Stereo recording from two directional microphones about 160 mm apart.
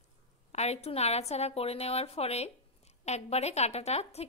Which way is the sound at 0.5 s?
40° left (ahead or behind).